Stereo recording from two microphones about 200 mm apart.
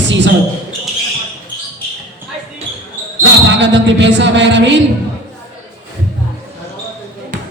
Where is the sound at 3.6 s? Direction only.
65° right (ahead or behind).